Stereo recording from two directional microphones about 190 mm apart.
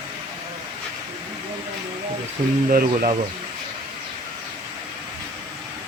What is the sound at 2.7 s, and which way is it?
Speech, 45° right (ahead or behind).